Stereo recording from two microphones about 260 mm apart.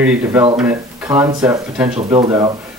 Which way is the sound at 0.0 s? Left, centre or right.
Centre.